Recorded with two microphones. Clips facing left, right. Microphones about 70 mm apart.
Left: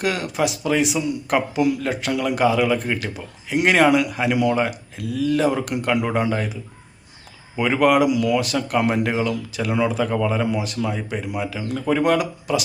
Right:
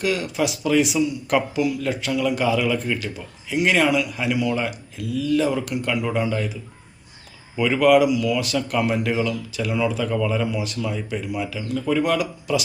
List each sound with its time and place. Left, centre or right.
0.0 s speech: left
3.5 s speech: left
7.6 s speech: left